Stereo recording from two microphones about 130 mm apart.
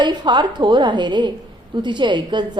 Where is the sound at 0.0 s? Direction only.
35° right (ahead or behind).